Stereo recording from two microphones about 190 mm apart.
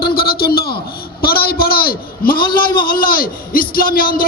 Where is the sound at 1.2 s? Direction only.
55° left (ahead or behind).